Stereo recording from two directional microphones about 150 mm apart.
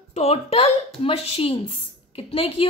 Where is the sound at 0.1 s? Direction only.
45° left (ahead or behind).